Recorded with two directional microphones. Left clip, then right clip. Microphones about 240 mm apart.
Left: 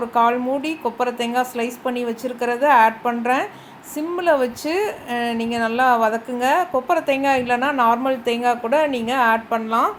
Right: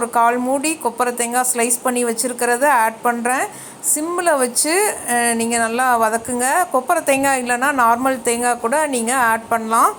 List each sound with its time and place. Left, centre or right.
0.1 s a woman's voice: centre